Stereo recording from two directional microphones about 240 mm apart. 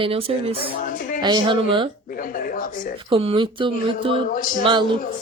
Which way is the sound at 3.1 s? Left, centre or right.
Right.